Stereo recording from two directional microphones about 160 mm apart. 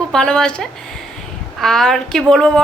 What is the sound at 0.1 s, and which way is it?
A woman's voice, 5° left (ahead or behind).